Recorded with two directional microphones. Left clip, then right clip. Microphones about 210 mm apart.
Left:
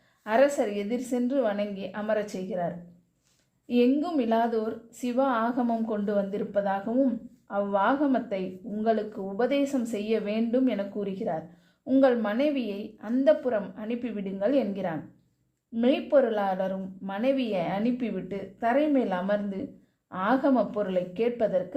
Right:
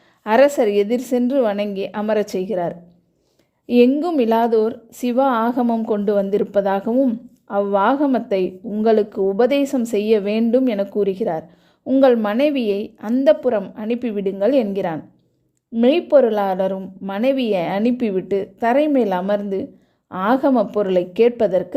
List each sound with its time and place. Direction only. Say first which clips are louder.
0.3 s a woman's voice: right 9 dB; 45° right (ahead or behind)